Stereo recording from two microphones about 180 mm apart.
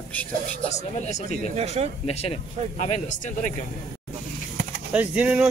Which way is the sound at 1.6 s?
35° right (ahead or behind).